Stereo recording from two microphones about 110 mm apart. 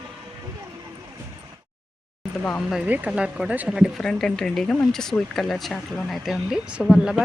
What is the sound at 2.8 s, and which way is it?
Speech, 15° right (ahead or behind).